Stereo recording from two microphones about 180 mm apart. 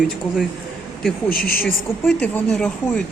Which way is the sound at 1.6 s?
5° left (ahead or behind).